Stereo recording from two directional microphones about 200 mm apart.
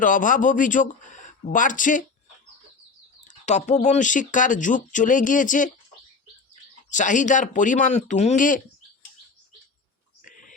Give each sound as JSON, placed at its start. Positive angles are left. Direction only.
{"t": 0.0, "sound": "speech", "side_deg": 40}
{"t": 3.2, "sound": "speech", "side_deg": 35}
{"t": 6.9, "sound": "speech", "side_deg": 40}
{"t": 10.2, "sound": "a sound", "side_deg": 40}